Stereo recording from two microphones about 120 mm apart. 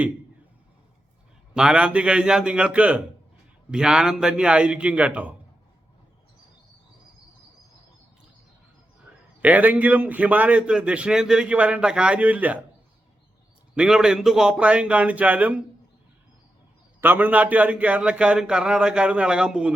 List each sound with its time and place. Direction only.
1.5 s a man's voice: 5° right (ahead or behind)
9.4 s a man's voice: 10° right (ahead or behind)
13.7 s a man's voice: 5° right (ahead or behind)
17.0 s a man's voice: 15° right (ahead or behind)